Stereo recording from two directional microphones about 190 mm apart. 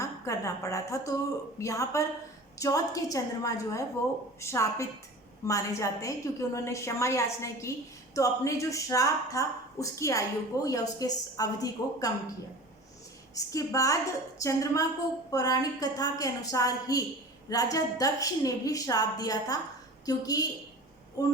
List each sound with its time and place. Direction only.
0.0 s a woman's voice: 15° left (ahead or behind)
13.3 s a woman's voice: 15° left (ahead or behind)